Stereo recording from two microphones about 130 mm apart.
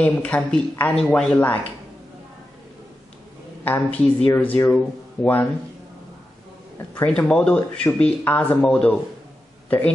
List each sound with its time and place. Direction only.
0.0 s speech: 10° left (ahead or behind)
3.6 s speech: 10° left (ahead or behind)
7.1 s speech: 5° left (ahead or behind)